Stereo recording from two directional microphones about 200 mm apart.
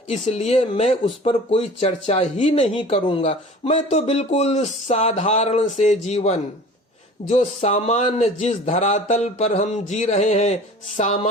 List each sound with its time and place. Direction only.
0.1 s speech: 35° left (ahead or behind)